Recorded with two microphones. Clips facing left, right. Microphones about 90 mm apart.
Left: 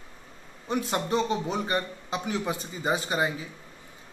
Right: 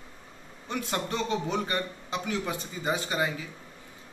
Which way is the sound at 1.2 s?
30° left (ahead or behind).